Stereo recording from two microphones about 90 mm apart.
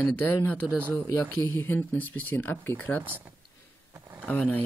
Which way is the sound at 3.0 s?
20° right (ahead or behind).